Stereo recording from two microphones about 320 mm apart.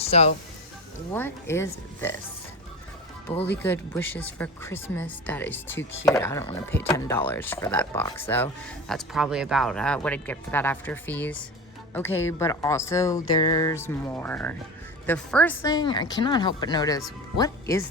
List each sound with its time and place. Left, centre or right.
0.0 s speech: centre
1.1 s speech: centre
3.6 s speech: centre